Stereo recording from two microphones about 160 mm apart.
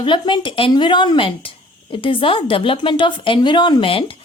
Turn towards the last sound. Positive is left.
turn(degrees=35)  # may be behind; listen again after turning